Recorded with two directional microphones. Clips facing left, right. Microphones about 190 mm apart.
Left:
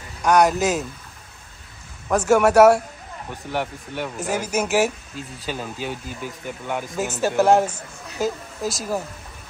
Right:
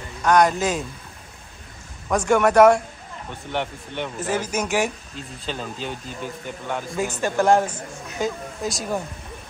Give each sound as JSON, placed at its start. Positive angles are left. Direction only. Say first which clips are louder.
{"t": 0.2, "sound": "speech", "louder": "left 1 dB", "side_deg": 10}
{"t": 2.0, "sound": "a man's voice", "louder": "left 2 dB", "side_deg": 5}